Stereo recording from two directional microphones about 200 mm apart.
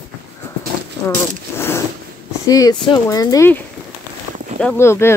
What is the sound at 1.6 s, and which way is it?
Vehicle, 10° left (ahead or behind).